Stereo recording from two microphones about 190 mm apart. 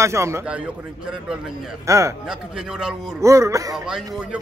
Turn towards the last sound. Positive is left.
turn(degrees=-5)  # may be behind; listen again after turning